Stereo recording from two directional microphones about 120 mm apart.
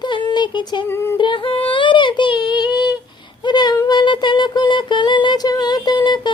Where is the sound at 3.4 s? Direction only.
35° left (ahead or behind).